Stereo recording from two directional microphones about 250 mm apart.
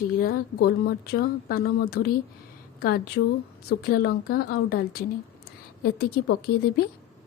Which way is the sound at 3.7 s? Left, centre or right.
Left.